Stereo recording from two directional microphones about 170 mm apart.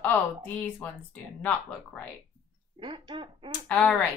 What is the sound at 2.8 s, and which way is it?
Speech, 25° right (ahead or behind).